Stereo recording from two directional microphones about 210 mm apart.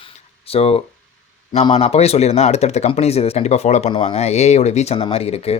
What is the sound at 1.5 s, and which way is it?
Speech, 30° left (ahead or behind).